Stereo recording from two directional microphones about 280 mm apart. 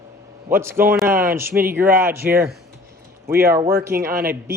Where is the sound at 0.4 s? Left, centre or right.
Centre.